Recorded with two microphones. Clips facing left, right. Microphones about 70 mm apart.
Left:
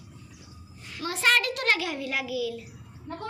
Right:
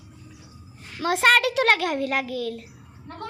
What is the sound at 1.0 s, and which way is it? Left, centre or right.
A child's voice, right.